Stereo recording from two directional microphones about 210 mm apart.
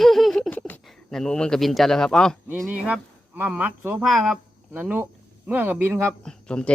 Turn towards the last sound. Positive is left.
turn(degrees=5)  # may be behind; listen again after turning